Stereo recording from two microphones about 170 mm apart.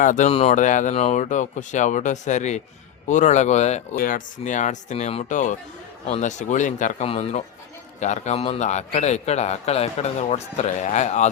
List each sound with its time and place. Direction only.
0.0 s speech: 45° left (ahead or behind)
3.9 s a man's voice: 55° left (ahead or behind)